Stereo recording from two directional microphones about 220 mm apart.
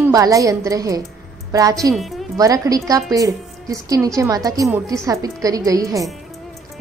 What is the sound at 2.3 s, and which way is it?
A woman's voice, 15° right (ahead or behind).